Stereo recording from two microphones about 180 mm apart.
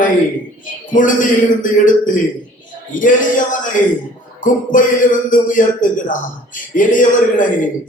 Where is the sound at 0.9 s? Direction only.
45° left (ahead or behind).